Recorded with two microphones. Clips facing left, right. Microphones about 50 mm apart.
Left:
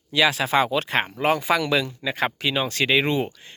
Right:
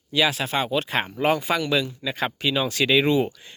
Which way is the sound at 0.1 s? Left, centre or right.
Left.